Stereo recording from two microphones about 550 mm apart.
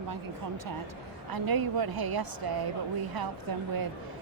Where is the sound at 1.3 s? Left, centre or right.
Right.